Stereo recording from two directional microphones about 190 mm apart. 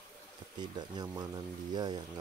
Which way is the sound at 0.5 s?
20° right (ahead or behind).